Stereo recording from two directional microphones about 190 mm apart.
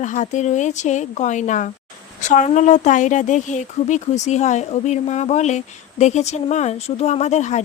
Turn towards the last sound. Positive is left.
turn(degrees=35)  # may be behind; listen again after turning